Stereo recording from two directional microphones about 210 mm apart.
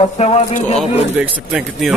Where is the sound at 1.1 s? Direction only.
5° right (ahead or behind).